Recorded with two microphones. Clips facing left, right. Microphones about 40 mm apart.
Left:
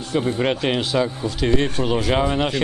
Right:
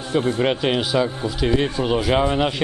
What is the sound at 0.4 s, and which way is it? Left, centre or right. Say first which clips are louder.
Speech: right 1 dB; centre.